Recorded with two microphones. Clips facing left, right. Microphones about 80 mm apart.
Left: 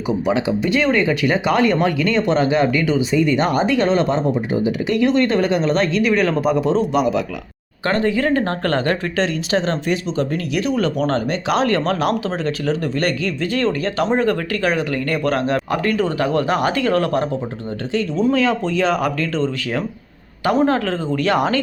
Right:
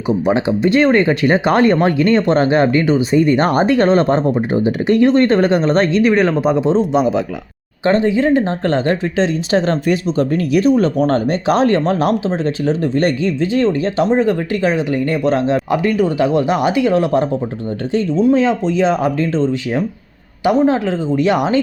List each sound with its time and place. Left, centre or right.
0.3 s speech: right
9.5 s speech: right
18.3 s speech: right
20.7 s speech: centre